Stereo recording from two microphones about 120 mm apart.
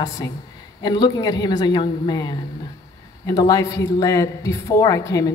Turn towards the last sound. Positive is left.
turn(degrees=30)  # may be behind; listen again after turning